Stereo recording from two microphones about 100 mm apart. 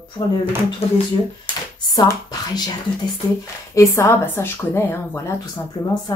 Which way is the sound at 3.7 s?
30° left (ahead or behind).